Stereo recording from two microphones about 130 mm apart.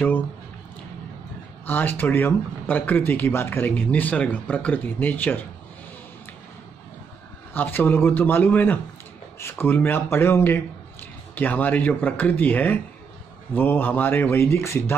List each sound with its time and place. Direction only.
1.7 s speech: 15° left (ahead or behind)
7.5 s speech: 15° left (ahead or behind)